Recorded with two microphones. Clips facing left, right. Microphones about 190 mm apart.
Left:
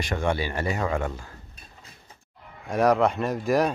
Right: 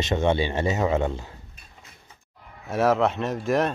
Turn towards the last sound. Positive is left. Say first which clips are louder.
# left 1 dB
turn(degrees=0)  # may be behind; listen again after turning